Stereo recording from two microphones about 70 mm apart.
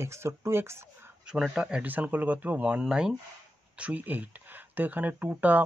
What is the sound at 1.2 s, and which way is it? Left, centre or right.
Speech, centre.